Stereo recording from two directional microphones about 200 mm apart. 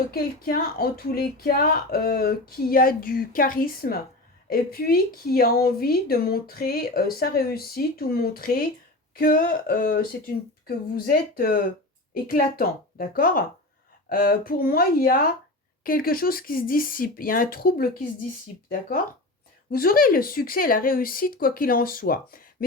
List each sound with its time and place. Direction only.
0.1 s a woman's voice: 50° left (ahead or behind)